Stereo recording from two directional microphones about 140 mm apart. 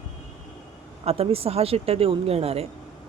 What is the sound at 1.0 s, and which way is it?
A woman's voice, 45° right (ahead or behind).